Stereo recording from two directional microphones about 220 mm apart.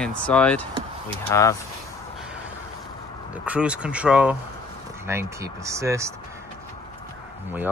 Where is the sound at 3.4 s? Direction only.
5° right (ahead or behind).